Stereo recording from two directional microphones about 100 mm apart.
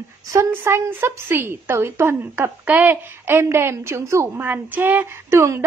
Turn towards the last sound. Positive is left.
turn(degrees=-25)  # may be behind; listen again after turning